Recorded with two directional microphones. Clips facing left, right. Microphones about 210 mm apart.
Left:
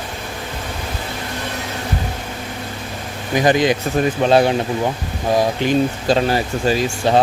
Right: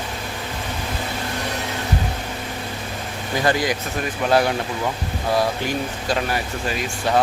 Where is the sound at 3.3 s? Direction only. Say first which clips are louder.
Left 6 dB; 20° left (ahead or behind).